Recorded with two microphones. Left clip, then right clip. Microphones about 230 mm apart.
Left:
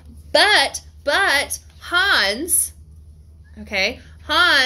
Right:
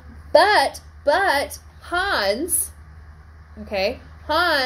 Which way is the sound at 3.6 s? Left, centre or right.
Left.